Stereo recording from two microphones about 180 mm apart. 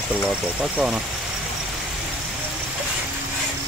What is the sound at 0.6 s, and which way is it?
Speech, 5° right (ahead or behind).